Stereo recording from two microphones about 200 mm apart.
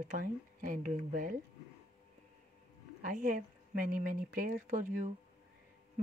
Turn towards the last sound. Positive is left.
turn(degrees=-40)  # may be behind; listen again after turning